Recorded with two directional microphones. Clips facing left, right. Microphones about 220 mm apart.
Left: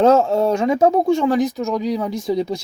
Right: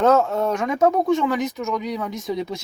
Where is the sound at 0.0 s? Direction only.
30° left (ahead or behind).